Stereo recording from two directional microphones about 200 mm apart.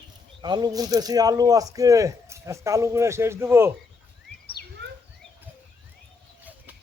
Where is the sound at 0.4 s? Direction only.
20° right (ahead or behind).